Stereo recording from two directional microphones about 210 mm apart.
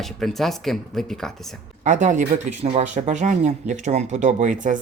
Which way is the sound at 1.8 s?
35° right (ahead or behind).